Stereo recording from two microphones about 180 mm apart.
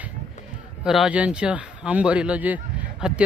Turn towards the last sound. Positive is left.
turn(degrees=-5)  # may be behind; listen again after turning